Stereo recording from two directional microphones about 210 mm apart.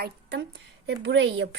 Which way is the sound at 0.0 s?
55° right (ahead or behind).